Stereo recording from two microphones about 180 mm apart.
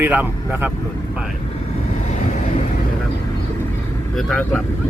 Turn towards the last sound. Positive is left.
turn(degrees=0)  # may be behind; listen again after turning